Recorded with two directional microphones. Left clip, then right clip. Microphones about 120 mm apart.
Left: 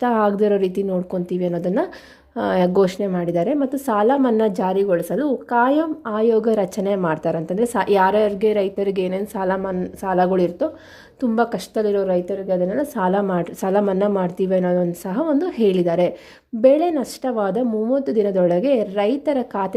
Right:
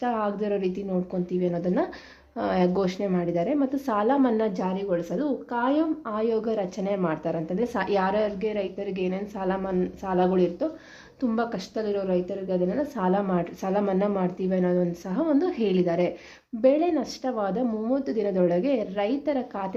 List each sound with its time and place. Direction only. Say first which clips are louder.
0.0 s speech: left 9 dB; 60° left (ahead or behind)
0.9 s a woman's voice: left 6 dB; 50° left (ahead or behind)
13.9 s speech: left 6 dB; 35° left (ahead or behind)
14.2 s a woman's voice: left 7 dB; 50° left (ahead or behind)